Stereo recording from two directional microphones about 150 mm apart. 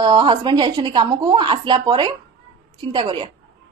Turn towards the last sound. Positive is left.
turn(degrees=-35)  # may be behind; listen again after turning